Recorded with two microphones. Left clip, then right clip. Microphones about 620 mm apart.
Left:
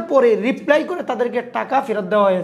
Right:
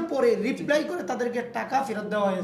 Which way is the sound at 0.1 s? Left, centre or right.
Left.